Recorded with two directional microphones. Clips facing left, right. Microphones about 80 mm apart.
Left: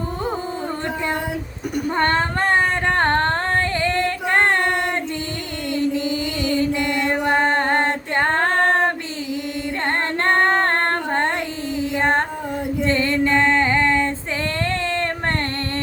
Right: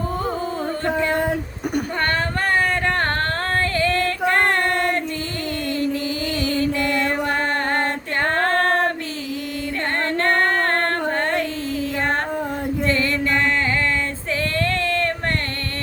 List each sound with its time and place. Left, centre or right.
2.0 s a sound: left
7.1 s female singing: left
9.8 s female singing: left
11.9 s music: left
12.8 s female singing: left
14.6 s a sound: left